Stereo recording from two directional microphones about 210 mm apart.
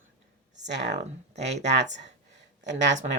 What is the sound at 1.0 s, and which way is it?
Speech, 30° right (ahead or behind).